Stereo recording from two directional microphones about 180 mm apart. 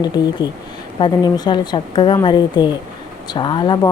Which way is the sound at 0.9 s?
25° left (ahead or behind).